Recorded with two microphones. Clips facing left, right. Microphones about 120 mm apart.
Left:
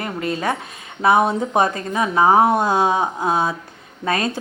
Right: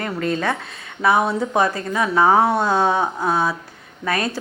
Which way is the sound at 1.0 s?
20° left (ahead or behind).